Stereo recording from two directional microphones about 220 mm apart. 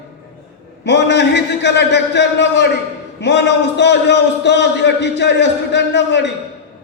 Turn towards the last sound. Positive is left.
turn(degrees=50)  # may be behind; listen again after turning